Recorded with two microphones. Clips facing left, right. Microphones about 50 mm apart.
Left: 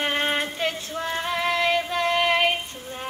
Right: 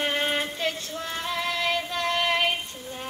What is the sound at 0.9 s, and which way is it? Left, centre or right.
Child singing, centre.